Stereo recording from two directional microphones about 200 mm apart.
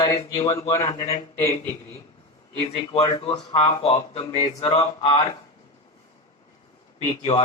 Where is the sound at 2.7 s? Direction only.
30° left (ahead or behind).